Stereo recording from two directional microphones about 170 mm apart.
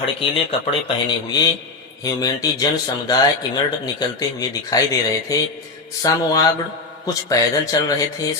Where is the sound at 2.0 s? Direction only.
20° left (ahead or behind).